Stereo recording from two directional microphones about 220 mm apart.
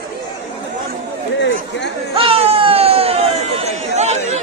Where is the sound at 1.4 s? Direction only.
55° left (ahead or behind).